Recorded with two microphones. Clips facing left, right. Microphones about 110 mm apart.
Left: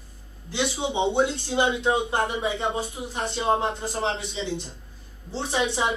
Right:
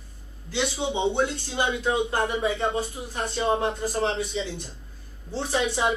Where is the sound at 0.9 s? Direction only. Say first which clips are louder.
Left 3 dB; 25° left (ahead or behind).